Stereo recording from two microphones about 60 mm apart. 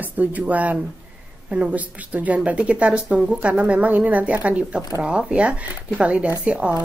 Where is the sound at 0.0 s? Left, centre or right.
Right.